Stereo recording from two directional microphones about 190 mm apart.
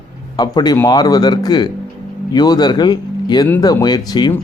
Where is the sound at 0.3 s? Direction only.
20° left (ahead or behind).